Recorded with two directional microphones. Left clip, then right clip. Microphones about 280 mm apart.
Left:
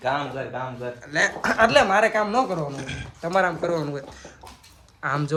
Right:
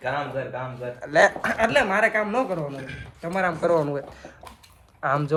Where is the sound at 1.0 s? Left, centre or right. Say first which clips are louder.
Right 5 dB; centre.